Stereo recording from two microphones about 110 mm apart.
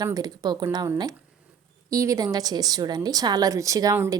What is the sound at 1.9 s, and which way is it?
A woman's voice, 30° right (ahead or behind).